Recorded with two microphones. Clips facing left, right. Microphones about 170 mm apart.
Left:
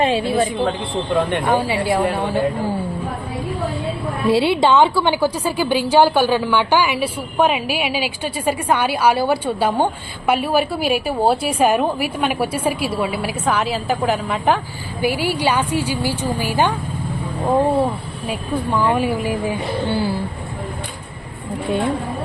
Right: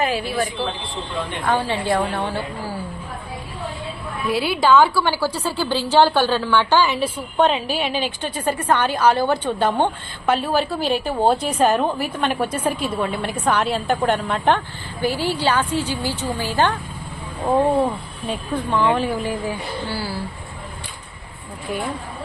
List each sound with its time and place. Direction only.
0.0 s a woman's voice: 25° left (ahead or behind)
1.1 s speech: 55° left (ahead or behind)
1.5 s a woman's voice: 10° left (ahead or behind)
4.3 s a woman's voice: 25° left (ahead or behind)